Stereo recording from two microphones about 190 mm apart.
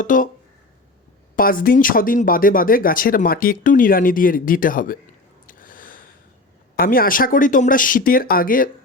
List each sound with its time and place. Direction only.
0.0 s speech: 45° left (ahead or behind)
1.4 s speech: 50° left (ahead or behind)
5.5 s a sound: 45° left (ahead or behind)
6.7 s speech: 50° left (ahead or behind)